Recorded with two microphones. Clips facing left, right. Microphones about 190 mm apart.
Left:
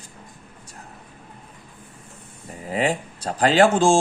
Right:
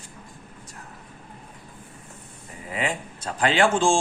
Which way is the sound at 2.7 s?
35° left (ahead or behind).